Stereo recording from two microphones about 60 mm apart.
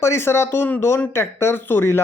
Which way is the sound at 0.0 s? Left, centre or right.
Left.